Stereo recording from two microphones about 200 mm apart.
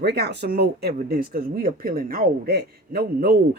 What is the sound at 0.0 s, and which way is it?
A man's voice, 55° right (ahead or behind).